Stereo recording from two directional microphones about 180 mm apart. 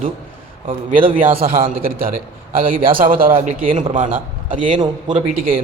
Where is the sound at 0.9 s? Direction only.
50° right (ahead or behind).